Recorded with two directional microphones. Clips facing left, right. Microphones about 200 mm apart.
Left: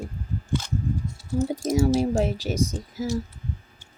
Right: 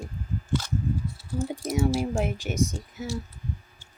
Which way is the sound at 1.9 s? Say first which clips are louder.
Left 4 dB; 35° left (ahead or behind).